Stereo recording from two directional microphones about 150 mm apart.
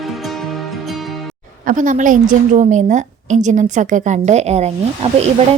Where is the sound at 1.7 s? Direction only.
60° right (ahead or behind).